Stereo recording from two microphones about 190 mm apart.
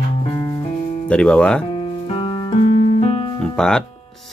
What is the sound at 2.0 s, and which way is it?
Music, 25° left (ahead or behind).